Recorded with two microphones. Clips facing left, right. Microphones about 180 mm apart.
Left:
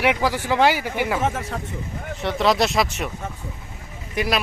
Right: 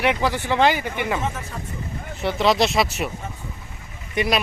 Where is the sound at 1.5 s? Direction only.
70° left (ahead or behind).